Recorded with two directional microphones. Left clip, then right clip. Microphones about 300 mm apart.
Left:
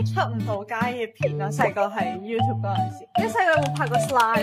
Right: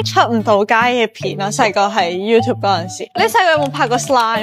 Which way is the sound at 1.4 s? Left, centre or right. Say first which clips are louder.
Right 10 dB; right.